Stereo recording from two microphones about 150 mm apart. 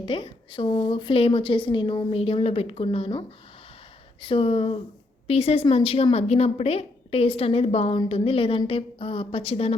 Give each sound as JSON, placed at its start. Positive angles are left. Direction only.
{"t": 0.0, "sound": "a woman's voice", "side_deg": 35}